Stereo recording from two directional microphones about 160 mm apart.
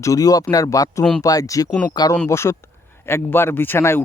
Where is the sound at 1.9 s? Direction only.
25° left (ahead or behind).